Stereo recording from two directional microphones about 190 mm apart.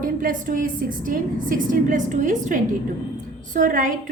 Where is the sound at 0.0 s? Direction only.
45° right (ahead or behind).